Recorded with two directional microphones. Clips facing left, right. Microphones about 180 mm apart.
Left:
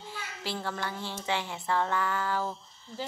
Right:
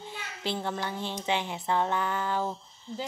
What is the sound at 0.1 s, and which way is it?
Speech, 20° right (ahead or behind).